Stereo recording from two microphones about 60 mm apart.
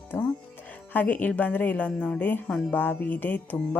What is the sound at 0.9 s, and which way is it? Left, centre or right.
Speech, left.